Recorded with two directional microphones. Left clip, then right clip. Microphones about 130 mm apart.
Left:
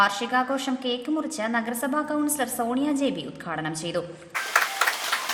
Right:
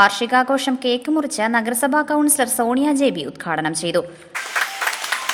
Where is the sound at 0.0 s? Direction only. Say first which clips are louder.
Right 7 dB; 60° right (ahead or behind).